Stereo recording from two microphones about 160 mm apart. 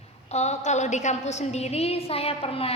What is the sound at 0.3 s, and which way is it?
A woman's voice, 45° left (ahead or behind).